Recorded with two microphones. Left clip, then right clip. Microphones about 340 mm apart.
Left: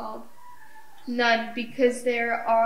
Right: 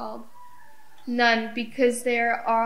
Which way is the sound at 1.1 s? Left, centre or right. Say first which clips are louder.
Right 1 dB; right.